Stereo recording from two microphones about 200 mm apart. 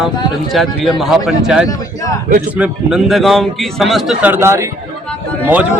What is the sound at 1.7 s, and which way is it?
Speech, 15° left (ahead or behind).